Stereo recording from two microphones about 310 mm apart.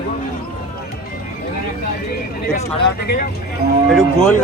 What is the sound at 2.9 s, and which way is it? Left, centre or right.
Speech, left.